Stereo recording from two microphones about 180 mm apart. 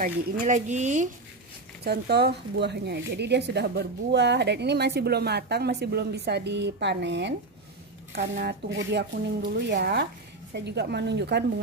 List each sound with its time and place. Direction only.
0.0 s speech: 45° right (ahead or behind)
1.9 s speech: 65° right (ahead or behind)